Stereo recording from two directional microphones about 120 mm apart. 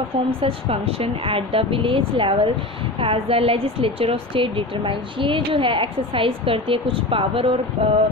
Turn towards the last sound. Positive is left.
turn(degrees=-50)  # may be behind; listen again after turning